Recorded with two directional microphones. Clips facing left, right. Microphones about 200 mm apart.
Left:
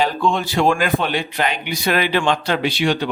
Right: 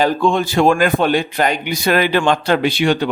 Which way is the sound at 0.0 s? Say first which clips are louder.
Right 4 dB; 50° right (ahead or behind).